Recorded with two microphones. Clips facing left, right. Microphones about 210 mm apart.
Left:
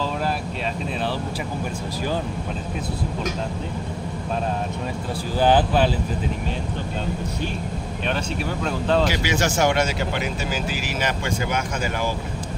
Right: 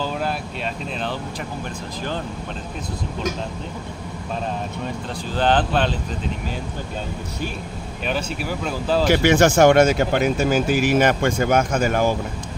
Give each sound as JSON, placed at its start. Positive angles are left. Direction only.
{"t": 5.4, "sound": "speech", "side_deg": 10}
{"t": 8.6, "sound": "speech", "side_deg": -5}
{"t": 9.1, "sound": "speech", "side_deg": -55}